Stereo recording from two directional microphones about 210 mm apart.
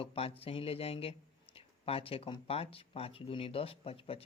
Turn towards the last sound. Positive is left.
turn(degrees=25)  # may be behind; listen again after turning